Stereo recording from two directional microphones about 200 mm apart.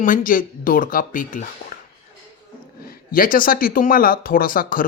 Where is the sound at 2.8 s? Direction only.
45° left (ahead or behind).